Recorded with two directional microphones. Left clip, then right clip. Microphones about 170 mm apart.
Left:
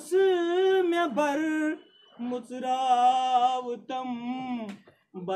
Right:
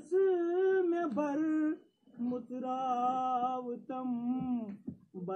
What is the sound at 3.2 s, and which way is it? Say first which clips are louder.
Mantra: left 9 dB; 65° left (ahead or behind).